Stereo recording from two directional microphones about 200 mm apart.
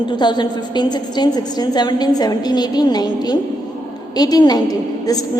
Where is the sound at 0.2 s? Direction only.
20° left (ahead or behind).